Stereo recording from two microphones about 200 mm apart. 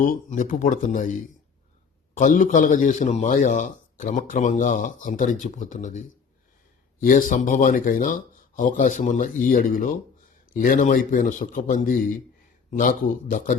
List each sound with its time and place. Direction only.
0.0 s a man's voice: 40° left (ahead or behind)
2.1 s a man's voice: 40° left (ahead or behind)
13.3 s a man's voice: 40° left (ahead or behind)